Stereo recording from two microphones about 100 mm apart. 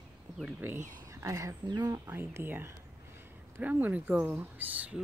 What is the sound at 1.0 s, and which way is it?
Speech, 30° right (ahead or behind).